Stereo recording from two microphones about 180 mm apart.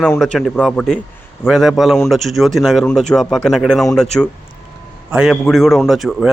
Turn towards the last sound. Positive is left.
turn(degrees=0)  # may be behind; listen again after turning